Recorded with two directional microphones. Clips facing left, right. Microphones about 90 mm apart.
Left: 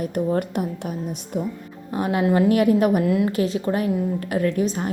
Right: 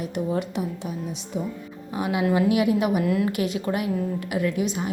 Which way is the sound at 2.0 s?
40° left (ahead or behind).